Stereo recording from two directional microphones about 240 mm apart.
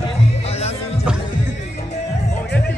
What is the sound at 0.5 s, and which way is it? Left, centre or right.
Music, left.